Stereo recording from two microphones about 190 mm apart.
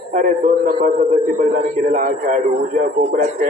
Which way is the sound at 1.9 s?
45° right (ahead or behind).